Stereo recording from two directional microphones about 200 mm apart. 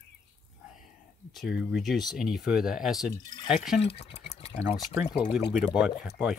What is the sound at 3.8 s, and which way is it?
Speech, 30° left (ahead or behind).